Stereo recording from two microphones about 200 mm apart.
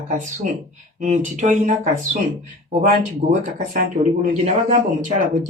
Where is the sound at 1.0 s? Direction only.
35° right (ahead or behind).